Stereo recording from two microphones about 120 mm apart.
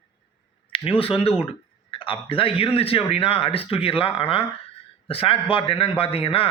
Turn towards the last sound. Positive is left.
turn(degrees=50)  # may be behind; listen again after turning